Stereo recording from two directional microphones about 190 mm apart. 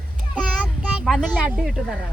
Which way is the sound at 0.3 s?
5° right (ahead or behind).